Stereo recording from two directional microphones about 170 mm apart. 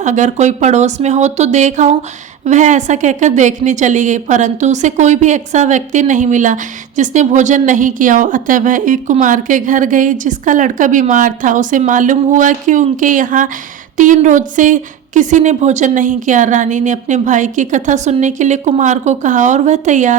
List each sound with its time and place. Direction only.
0.0 s a woman's voice: 45° right (ahead or behind)